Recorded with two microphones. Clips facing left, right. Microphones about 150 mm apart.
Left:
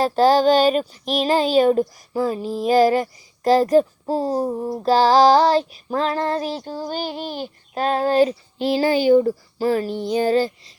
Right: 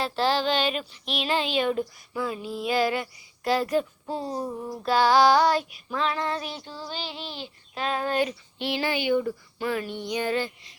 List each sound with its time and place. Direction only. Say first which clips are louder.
0.0 s speech: left 10 dB; 40° left (ahead or behind)